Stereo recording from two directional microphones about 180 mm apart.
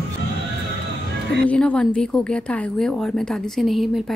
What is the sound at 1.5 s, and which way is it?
Speech, 5° left (ahead or behind).